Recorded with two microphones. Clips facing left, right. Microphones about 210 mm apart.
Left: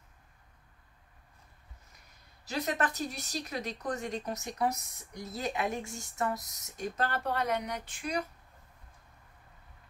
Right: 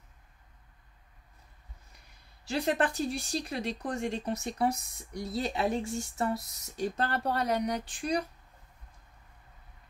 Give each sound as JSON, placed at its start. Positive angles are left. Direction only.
{"t": 2.4, "sound": "speech", "side_deg": -30}